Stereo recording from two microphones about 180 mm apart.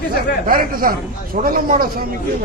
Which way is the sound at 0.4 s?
50° right (ahead or behind).